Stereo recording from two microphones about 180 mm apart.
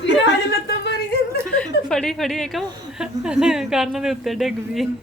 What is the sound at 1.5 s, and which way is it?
A woman's voice, 5° left (ahead or behind).